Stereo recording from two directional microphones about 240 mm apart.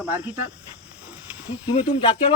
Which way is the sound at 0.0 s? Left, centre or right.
Centre.